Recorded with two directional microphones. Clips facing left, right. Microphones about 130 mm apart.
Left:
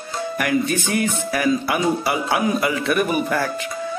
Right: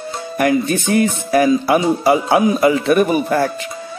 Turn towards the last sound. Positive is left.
turn(degrees=-30)  # may be behind; listen again after turning